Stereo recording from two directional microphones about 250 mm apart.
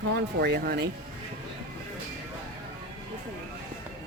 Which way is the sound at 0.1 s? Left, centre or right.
Right.